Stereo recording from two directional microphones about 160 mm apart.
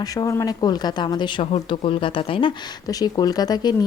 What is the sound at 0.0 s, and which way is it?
Speech, 20° left (ahead or behind).